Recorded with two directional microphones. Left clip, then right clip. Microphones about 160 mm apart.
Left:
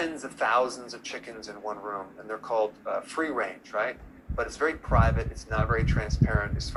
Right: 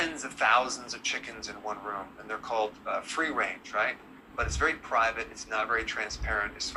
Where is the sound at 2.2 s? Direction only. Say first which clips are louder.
Left 3 dB; 35° left (ahead or behind).